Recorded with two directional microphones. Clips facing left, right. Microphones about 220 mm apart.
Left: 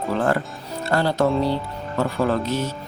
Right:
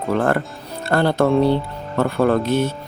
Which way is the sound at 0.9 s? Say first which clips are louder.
Right 4 dB; 55° right (ahead or behind).